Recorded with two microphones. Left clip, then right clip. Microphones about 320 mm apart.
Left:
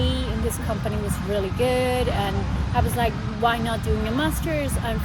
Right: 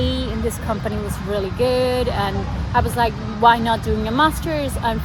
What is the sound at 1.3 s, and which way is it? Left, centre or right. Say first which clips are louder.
Speech: right 3 dB; centre.